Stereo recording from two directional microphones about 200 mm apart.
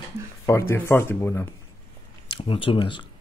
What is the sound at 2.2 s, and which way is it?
Speech, 25° left (ahead or behind).